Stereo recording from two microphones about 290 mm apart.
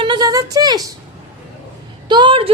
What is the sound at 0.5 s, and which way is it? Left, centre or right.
Speech, centre.